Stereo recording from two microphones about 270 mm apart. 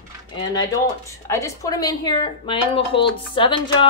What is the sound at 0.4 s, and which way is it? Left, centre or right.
A woman's voice, centre.